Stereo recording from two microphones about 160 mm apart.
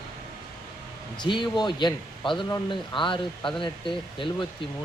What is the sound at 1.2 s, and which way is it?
Speech, 30° left (ahead or behind).